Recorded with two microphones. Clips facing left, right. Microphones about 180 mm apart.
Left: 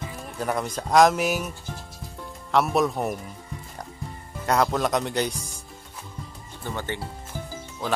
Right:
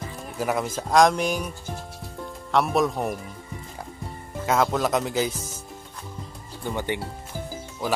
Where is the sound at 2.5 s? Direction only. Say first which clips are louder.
Even; centre (ahead or behind).